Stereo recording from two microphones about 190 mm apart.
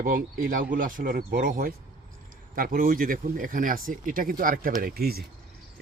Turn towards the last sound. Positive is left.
turn(degrees=-55)  # may be behind; listen again after turning